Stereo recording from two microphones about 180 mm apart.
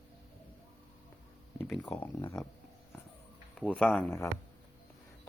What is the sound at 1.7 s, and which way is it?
Speech, 5° left (ahead or behind).